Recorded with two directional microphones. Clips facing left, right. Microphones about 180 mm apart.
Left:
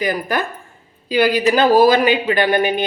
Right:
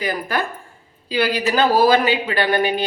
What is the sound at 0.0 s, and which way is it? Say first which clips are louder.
Speech: left 3 dB; 15° left (ahead or behind).